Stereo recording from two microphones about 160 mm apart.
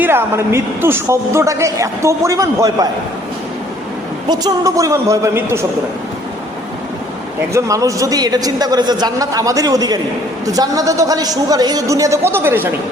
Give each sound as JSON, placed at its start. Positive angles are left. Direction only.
{"t": 0.0, "sound": "a man's voice", "side_deg": -15}
{"t": 4.3, "sound": "a man's voice", "side_deg": -25}
{"t": 7.5, "sound": "a man's voice", "side_deg": -20}